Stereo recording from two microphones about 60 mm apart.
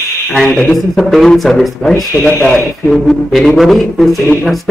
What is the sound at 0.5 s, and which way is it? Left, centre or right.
Speech, centre.